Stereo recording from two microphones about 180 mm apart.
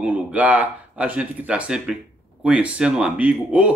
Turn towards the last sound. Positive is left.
turn(degrees=-5)  # may be behind; listen again after turning